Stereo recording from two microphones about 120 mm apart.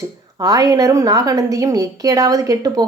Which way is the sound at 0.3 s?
30° right (ahead or behind).